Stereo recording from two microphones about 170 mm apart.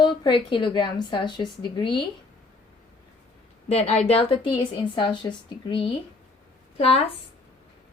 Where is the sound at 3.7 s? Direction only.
35° left (ahead or behind).